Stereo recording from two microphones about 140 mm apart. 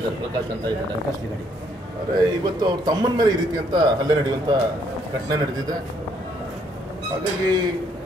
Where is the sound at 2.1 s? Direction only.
30° right (ahead or behind).